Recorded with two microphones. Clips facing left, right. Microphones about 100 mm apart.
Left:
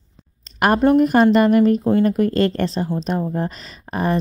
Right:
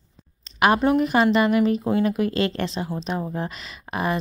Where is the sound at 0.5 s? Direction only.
45° left (ahead or behind).